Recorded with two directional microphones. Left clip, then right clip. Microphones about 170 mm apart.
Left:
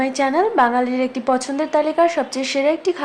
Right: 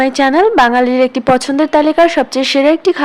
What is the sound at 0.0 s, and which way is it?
A woman's voice, 45° right (ahead or behind).